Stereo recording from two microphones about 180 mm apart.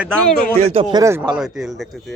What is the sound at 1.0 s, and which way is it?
Speech, 15° right (ahead or behind).